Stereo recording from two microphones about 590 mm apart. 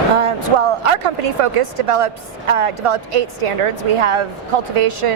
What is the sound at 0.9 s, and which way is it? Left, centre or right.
A woman's voice, right.